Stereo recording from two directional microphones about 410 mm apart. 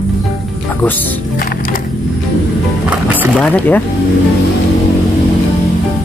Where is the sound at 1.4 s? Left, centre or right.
Left.